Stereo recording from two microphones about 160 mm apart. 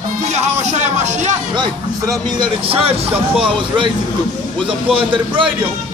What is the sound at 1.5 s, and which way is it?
Speech, 25° right (ahead or behind).